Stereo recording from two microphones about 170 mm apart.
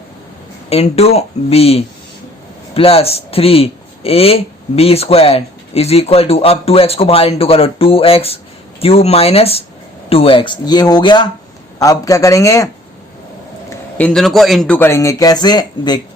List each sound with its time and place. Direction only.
0.7 s a man's voice: 35° left (ahead or behind); by 12.6 s 20° left (ahead or behind)
14.0 s speech: 5° left (ahead or behind)
14.8 s speech: 15° left (ahead or behind)